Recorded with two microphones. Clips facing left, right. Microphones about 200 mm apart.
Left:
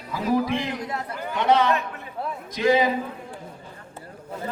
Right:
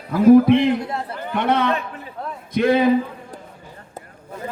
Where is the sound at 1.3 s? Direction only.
55° right (ahead or behind).